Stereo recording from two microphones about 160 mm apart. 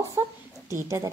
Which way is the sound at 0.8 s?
20° right (ahead or behind).